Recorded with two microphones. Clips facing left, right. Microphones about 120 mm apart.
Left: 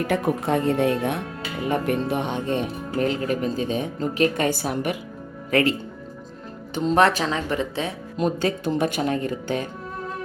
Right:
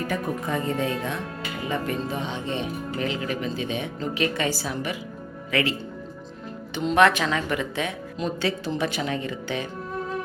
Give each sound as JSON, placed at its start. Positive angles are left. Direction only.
{"t": 0.1, "sound": "speech", "side_deg": 70}
{"t": 5.5, "sound": "speech", "side_deg": 45}
{"t": 6.7, "sound": "a woman's voice", "side_deg": 35}
{"t": 8.2, "sound": "speech", "side_deg": 45}